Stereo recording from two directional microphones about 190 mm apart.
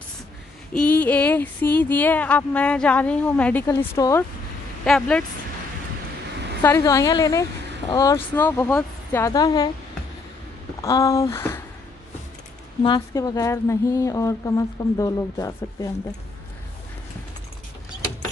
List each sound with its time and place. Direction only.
0.7 s speech: 10° left (ahead or behind)
4.8 s speech: 5° left (ahead or behind)
6.6 s speech: 15° left (ahead or behind)
9.2 s a woman's voice: 20° left (ahead or behind)
10.8 s speech: 15° left (ahead or behind)
12.8 s speech: 20° left (ahead or behind)